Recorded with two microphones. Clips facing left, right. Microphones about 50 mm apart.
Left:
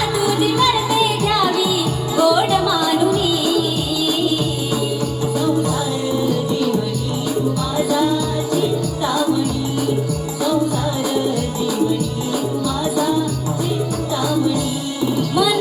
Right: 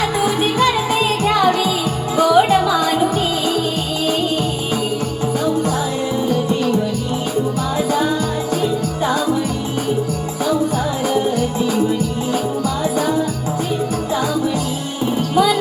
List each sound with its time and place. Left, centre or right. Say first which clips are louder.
0.2 s music: left 1 dB; right
6.2 s music: right 3 dB; right
7.8 s music: left 1 dB; right
15.0 s music: right 2 dB; right